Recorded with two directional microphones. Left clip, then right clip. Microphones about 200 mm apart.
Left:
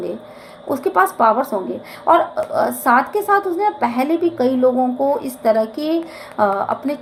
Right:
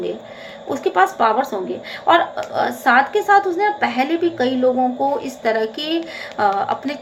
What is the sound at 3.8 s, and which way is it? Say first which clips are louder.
A woman's voice: left 1 dB; 40° left (ahead or behind).